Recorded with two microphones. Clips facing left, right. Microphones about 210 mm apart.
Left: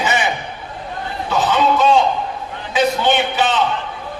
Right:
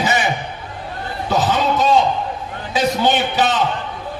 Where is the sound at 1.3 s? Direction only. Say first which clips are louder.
Left 1 dB; 40° right (ahead or behind).